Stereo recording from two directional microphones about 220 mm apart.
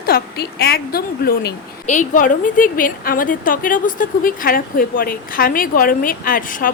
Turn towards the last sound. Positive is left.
turn(degrees=40)  # may be behind; listen again after turning